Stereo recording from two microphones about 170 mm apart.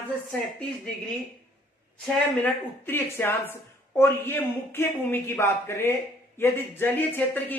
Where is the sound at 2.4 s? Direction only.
10° left (ahead or behind).